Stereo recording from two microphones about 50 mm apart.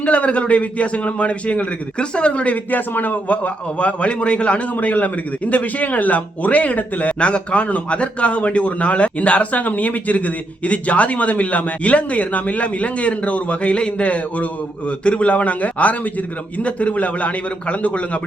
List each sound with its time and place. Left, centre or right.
0.0 s a man's voice: left